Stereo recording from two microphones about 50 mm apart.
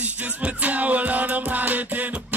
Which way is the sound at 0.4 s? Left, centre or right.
Right.